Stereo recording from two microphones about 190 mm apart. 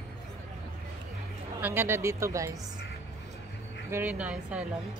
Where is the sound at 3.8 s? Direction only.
10° right (ahead or behind).